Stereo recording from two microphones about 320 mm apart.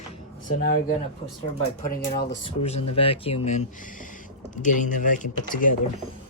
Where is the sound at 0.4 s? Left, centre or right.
Left.